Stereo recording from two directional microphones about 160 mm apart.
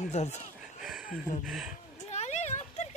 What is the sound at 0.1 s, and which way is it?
Speech, 45° left (ahead or behind).